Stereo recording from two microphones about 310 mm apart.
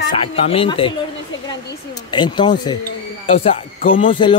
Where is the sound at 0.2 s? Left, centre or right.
Centre.